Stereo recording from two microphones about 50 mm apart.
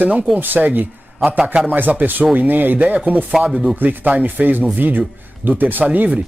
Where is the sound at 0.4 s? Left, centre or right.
Right.